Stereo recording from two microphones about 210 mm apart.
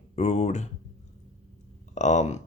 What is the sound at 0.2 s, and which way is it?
Speech, 35° left (ahead or behind).